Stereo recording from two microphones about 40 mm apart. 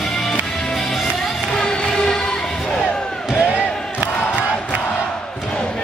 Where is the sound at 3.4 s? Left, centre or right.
Right.